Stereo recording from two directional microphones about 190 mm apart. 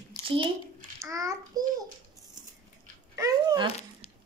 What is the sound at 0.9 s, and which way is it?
Speech, 15° right (ahead or behind).